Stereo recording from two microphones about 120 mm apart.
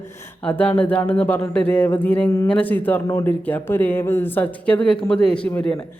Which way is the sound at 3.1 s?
25° left (ahead or behind).